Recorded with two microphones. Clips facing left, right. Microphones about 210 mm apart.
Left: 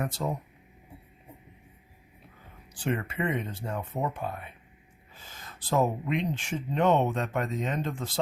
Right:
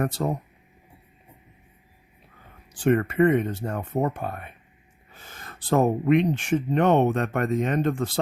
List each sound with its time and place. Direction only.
0.0 s speech: 55° right (ahead or behind)
2.7 s speech: 55° right (ahead or behind)
5.1 s a sound: 55° right (ahead or behind)
6.3 s speech: 55° right (ahead or behind)